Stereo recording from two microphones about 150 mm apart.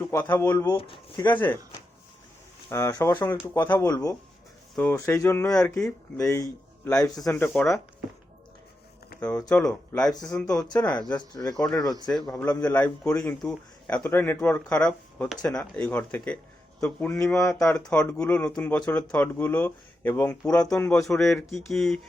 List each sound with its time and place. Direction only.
0.1 s speech: 15° left (ahead or behind)
0.8 s speech: 30° left (ahead or behind)
1.3 s speech: 10° left (ahead or behind)
2.6 s speech: 20° left (ahead or behind)
7.3 s speech: 10° left (ahead or behind)
9.2 s speech: 10° left (ahead or behind)
17.1 s speech: 20° left (ahead or behind)
17.5 s speech: 5° left (ahead or behind)